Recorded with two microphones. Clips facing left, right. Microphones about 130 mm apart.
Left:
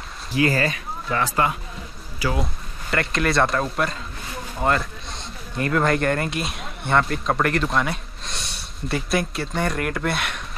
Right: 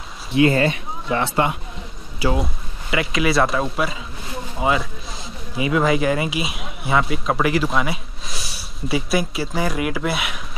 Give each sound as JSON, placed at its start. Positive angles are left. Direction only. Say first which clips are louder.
{"t": 0.3, "sound": "speech", "louder": "right 5 dB", "side_deg": -25}
{"t": 2.3, "sound": "a man's voice", "louder": "right 3 dB", "side_deg": 0}